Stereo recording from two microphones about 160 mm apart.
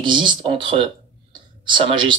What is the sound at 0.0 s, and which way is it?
Speech, 30° right (ahead or behind).